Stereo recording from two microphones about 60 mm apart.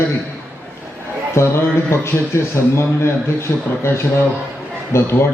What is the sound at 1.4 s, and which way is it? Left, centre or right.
A man's voice, left.